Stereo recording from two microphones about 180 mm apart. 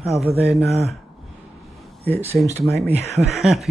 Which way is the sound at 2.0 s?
35° right (ahead or behind).